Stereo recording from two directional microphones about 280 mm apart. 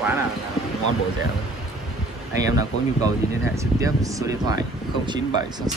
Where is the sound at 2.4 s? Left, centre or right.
Centre.